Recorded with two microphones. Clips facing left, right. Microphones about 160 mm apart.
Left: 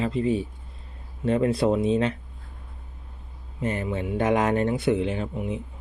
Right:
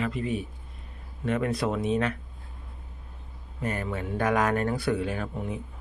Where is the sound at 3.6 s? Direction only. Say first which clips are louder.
Left 4 dB; 25° left (ahead or behind).